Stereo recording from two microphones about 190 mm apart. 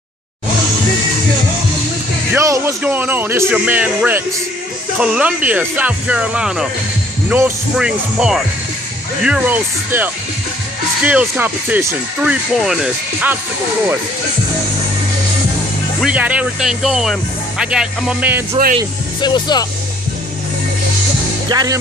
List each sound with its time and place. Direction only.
2.3 s speech: 15° right (ahead or behind)
16.0 s speech: 5° right (ahead or behind)
19.2 s speech: 20° left (ahead or behind)
21.5 s speech: 20° right (ahead or behind)